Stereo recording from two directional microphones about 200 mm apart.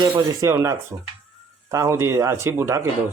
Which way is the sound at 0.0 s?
15° right (ahead or behind).